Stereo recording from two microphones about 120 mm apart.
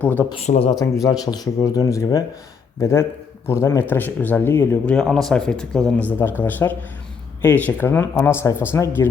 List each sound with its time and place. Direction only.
0.0 s speech: 15° left (ahead or behind)
0.4 s speech: 65° left (ahead or behind)
1.0 s speech: 30° left (ahead or behind)
4.9 s speech: 5° left (ahead or behind); by 9.0 s 20° left (ahead or behind)